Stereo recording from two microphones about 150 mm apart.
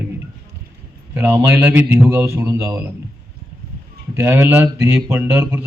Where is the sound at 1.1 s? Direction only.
15° right (ahead or behind).